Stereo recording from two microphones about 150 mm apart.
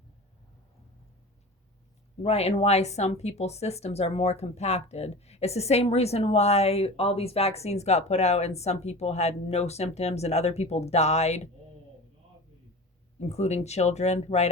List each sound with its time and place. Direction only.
2.2 s speech: 45° left (ahead or behind)
13.1 s speech: 45° left (ahead or behind)